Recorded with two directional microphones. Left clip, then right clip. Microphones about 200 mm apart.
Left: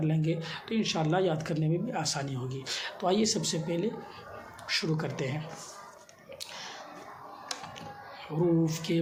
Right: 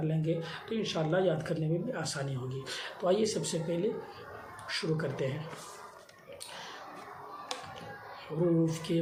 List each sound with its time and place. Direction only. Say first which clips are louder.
0.0 s speech: left 1 dB; 40° left (ahead or behind)
8.6 s speech: left 1 dB; 35° left (ahead or behind)